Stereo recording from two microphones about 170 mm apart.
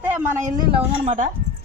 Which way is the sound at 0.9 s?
50° right (ahead or behind).